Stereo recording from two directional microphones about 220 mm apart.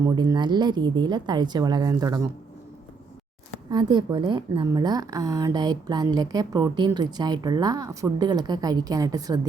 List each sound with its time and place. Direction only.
0.0 s speech: 15° right (ahead or behind)
3.7 s a woman's voice: 20° right (ahead or behind)